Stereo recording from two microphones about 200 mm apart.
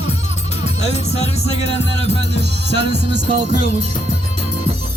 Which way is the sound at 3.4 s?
30° right (ahead or behind).